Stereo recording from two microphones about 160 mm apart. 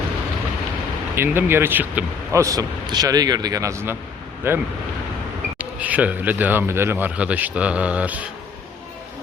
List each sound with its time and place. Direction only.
1.1 s speech: 15° right (ahead or behind)